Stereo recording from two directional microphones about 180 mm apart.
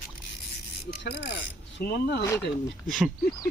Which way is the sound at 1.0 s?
70° left (ahead or behind).